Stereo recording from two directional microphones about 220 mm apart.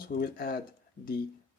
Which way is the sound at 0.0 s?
40° left (ahead or behind).